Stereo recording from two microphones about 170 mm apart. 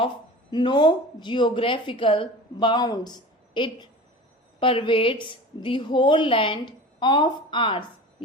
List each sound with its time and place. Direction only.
0.5 s speech: 30° left (ahead or behind)